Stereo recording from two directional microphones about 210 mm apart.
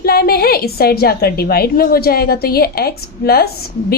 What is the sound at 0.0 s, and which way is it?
A woman's voice, 45° left (ahead or behind).